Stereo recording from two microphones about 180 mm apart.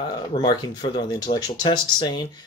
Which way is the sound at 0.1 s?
25° left (ahead or behind).